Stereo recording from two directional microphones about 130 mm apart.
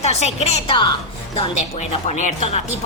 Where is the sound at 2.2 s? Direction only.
65° left (ahead or behind).